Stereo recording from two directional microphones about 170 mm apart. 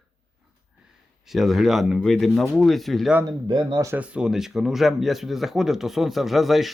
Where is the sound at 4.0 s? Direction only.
5° right (ahead or behind).